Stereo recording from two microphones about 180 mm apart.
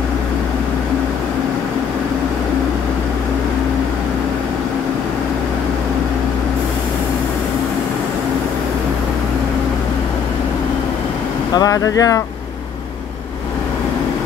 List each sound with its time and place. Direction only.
11.5 s speech: 20° left (ahead or behind)